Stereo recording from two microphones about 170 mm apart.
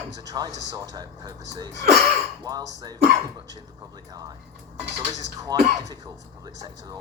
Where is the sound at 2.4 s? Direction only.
20° right (ahead or behind).